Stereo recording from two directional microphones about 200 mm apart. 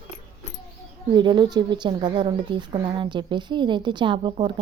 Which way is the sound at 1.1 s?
20° right (ahead or behind).